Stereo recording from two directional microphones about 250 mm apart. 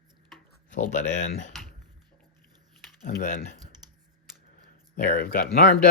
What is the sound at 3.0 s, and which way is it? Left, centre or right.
Speech, left.